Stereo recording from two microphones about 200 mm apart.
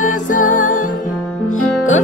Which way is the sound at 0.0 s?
40° left (ahead or behind).